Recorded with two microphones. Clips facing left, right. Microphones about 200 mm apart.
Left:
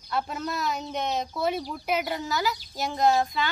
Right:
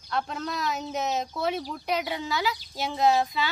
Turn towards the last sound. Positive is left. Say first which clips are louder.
# even
turn(degrees=0)  # may be behind; listen again after turning